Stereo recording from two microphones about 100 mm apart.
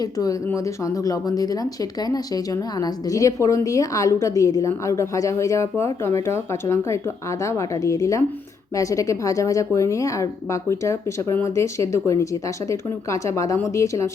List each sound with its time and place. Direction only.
0.0 s a woman's voice: 35° left (ahead or behind)